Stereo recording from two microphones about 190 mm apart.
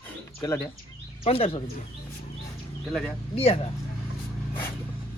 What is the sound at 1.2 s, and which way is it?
Speech, 30° left (ahead or behind).